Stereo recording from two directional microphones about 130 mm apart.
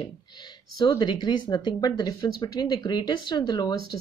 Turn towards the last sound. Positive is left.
turn(degrees=30)  # may be behind; listen again after turning